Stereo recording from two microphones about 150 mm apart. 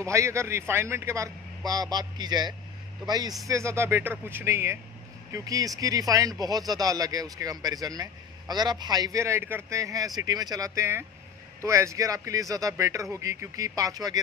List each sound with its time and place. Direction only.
0.0 s speech: 20° right (ahead or behind)